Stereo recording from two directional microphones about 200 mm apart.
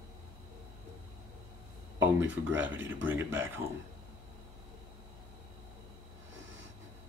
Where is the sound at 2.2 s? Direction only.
70° right (ahead or behind).